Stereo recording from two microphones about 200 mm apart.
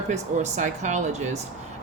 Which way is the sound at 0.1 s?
35° right (ahead or behind).